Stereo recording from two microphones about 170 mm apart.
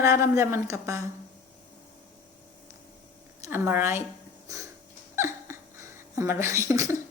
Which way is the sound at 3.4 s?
15° right (ahead or behind).